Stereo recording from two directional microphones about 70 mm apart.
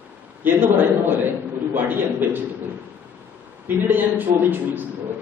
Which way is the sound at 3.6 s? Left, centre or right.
Right.